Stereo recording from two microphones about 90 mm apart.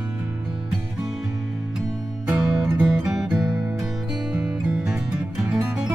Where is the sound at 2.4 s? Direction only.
10° right (ahead or behind).